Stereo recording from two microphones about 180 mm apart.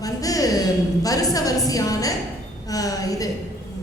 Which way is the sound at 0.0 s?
20° left (ahead or behind).